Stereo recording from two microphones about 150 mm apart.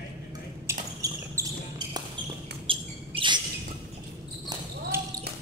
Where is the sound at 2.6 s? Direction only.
35° right (ahead or behind).